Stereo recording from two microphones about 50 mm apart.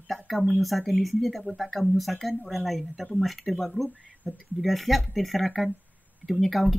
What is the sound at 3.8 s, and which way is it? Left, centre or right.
Speech, right.